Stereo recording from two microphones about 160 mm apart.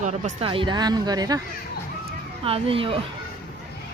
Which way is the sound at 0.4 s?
30° right (ahead or behind).